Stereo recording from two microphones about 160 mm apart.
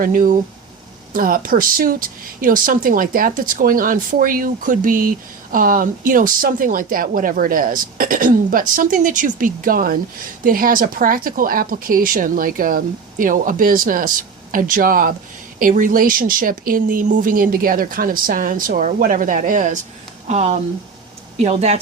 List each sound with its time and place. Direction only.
0.0 s speech: 60° right (ahead or behind)